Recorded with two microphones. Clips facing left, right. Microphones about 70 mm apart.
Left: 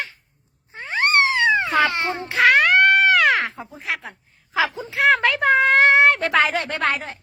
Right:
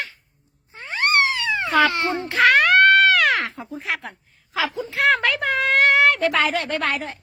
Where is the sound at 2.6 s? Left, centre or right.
Centre.